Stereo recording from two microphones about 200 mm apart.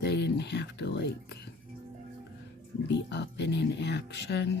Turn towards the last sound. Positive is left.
turn(degrees=55)  # may be behind; listen again after turning